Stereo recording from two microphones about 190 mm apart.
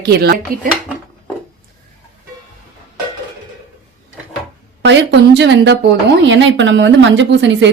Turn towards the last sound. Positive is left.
turn(degrees=-70)  # may be behind; listen again after turning